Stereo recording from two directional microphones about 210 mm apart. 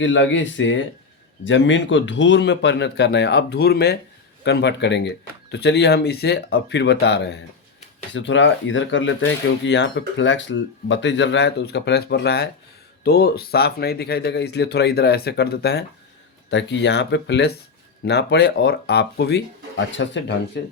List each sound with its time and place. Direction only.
0.0 s a man's voice: 60° left (ahead or behind)